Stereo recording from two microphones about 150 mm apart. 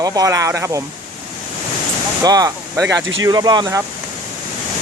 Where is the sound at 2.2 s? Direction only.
25° right (ahead or behind).